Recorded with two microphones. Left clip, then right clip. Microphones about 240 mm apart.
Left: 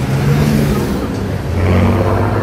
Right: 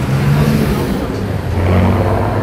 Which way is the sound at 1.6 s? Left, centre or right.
Right.